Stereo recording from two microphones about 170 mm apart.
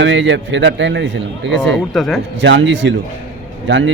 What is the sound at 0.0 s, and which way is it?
A man's voice, 90° right.